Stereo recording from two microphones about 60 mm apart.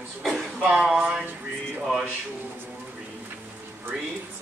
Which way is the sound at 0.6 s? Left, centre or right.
Centre.